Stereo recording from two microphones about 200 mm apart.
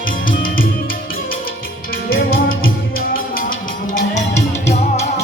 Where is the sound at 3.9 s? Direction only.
35° left (ahead or behind).